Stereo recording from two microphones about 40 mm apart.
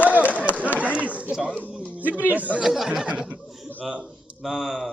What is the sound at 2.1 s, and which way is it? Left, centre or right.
Speech, right.